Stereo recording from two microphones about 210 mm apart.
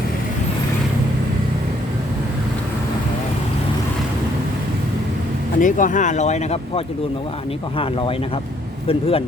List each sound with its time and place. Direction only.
5.5 s speech: 40° left (ahead or behind)